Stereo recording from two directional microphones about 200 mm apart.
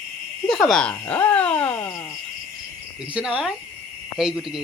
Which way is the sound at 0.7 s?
5° left (ahead or behind).